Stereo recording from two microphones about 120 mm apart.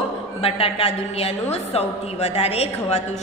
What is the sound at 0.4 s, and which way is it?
A woman's voice, 55° left (ahead or behind).